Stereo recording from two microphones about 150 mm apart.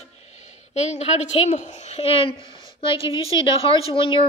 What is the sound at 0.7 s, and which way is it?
A woman's voice, 45° left (ahead or behind).